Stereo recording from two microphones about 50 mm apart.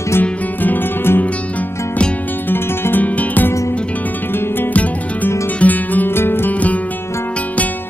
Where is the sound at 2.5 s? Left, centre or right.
Left.